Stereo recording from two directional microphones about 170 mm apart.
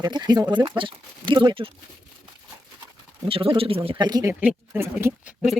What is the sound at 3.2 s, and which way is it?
Speech, 35° right (ahead or behind).